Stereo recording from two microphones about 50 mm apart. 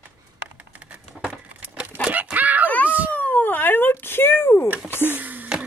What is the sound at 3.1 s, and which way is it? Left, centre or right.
Speech, left.